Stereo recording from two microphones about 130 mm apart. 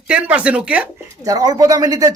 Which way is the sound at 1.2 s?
30° right (ahead or behind).